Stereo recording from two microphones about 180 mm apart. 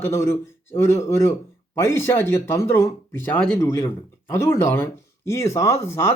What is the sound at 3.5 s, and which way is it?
A man's voice, 20° left (ahead or behind).